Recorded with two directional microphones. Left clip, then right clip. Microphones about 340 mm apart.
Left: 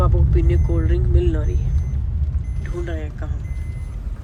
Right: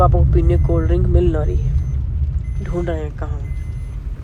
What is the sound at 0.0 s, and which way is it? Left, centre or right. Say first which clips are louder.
Speech: right 7 dB; centre.